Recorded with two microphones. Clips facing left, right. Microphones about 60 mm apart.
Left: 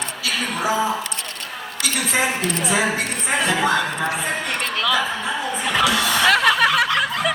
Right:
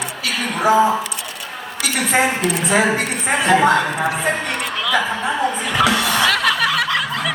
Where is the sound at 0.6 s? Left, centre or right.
Right.